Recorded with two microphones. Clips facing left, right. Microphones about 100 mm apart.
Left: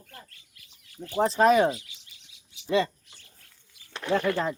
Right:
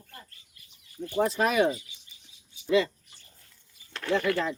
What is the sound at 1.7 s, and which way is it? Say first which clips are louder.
Chirp: right 1 dB; 90° left.